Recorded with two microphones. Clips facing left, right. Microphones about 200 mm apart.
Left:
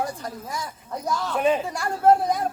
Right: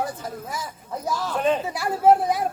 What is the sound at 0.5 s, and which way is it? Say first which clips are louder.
Speech: even; 5° right (ahead or behind).